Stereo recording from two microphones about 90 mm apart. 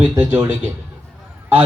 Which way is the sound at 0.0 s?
25° right (ahead or behind).